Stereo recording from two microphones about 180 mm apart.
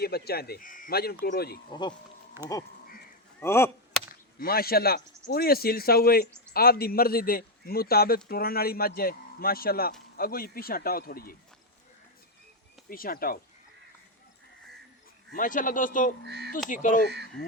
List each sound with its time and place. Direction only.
0.0 s a man's voice: 60° left (ahead or behind)
1.7 s speech: 25° left (ahead or behind)
2.4 s duck: 15° right (ahead or behind)
3.4 s speech: 15° left (ahead or behind)
4.4 s a man's voice: 55° left (ahead or behind)
12.9 s speech: 55° left (ahead or behind)
15.4 s speech: 50° left (ahead or behind)
16.2 s speech: 65° right (ahead or behind)
16.6 s speech: 45° left (ahead or behind)